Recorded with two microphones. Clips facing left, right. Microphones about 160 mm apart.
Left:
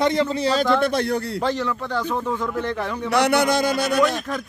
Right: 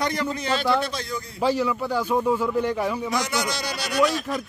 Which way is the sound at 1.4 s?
10° right (ahead or behind).